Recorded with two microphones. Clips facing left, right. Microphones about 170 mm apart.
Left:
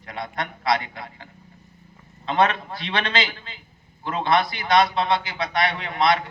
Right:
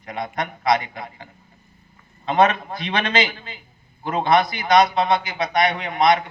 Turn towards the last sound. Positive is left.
turn(degrees=-20)  # may be behind; listen again after turning